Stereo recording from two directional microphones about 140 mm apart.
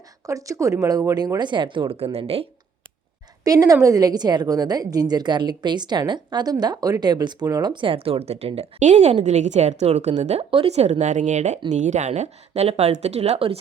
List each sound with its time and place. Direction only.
0.3 s a woman's voice: 25° right (ahead or behind); by 2.5 s 45° right (ahead or behind)
3.4 s a woman's voice: 25° right (ahead or behind); by 13.6 s 45° right (ahead or behind)